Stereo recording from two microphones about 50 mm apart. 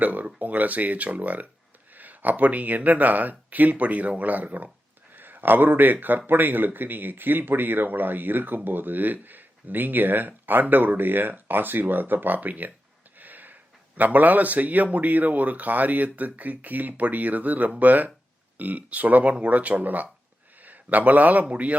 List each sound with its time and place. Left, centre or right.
0.0 s speech: right
13.1 s a sound: right
14.8 s a man's voice: right